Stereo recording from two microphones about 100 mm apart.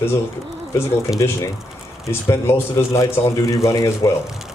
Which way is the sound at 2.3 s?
25° left (ahead or behind).